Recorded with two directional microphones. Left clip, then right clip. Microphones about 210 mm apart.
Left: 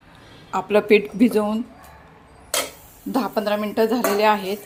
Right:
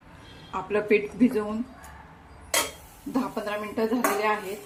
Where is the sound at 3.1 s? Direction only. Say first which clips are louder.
Left 8 dB; 45° left (ahead or behind).